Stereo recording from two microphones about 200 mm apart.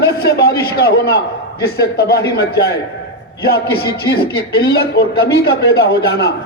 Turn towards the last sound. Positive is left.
turn(degrees=55)  # may be behind; listen again after turning